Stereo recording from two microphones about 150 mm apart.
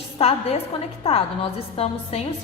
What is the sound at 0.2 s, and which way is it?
A woman's voice, 45° left (ahead or behind).